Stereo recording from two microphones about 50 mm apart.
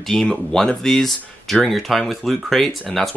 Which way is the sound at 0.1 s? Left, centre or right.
Centre.